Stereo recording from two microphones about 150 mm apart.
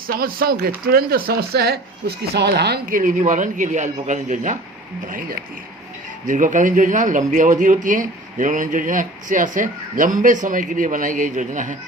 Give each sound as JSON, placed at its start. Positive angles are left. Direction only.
{"t": 0.1, "sound": "speech", "side_deg": -85}
{"t": 5.0, "sound": "speech", "side_deg": -70}